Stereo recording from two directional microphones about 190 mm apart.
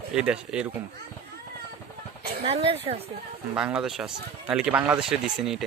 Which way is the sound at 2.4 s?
30° right (ahead or behind).